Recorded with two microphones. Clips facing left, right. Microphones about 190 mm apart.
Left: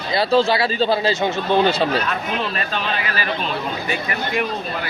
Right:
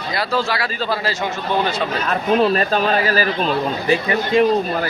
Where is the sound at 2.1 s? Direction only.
40° right (ahead or behind).